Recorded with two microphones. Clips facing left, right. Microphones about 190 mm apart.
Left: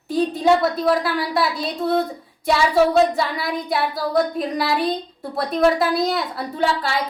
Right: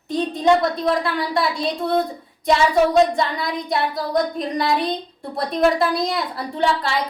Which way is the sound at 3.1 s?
5° left (ahead or behind).